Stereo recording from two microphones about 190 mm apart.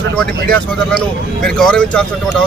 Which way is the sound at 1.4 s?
5° left (ahead or behind).